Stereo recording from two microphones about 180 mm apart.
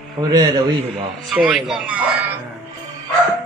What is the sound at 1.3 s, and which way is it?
A man's voice, 5° right (ahead or behind).